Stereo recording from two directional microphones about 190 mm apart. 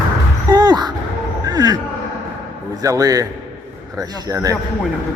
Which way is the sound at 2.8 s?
20° right (ahead or behind).